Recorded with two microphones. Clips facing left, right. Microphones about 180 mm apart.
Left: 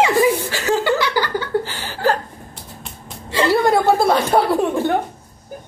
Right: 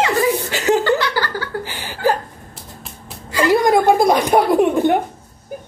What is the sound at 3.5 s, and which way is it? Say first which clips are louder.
Dishes: right 2 dB; 15° right (ahead or behind).